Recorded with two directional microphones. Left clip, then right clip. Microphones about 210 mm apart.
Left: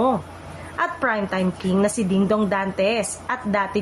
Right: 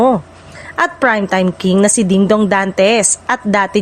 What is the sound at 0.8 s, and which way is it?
A woman's voice, 45° right (ahead or behind).